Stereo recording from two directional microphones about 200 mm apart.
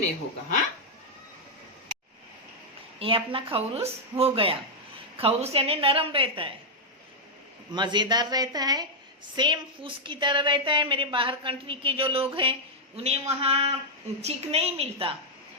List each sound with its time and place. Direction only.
3.0 s a woman's voice: 25° right (ahead or behind)
7.7 s a woman's voice: 20° right (ahead or behind)